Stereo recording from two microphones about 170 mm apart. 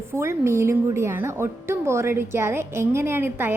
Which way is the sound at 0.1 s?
15° right (ahead or behind).